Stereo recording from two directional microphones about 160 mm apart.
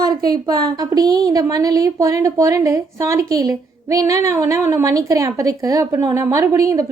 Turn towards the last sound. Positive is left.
turn(degrees=-20)  # may be behind; listen again after turning